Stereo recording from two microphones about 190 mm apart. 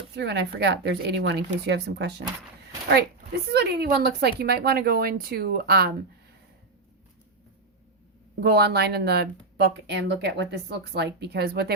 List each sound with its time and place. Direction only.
0.2 s speech: 60° right (ahead or behind)
3.5 s speech: 60° right (ahead or behind)
8.4 s speech: 60° right (ahead or behind)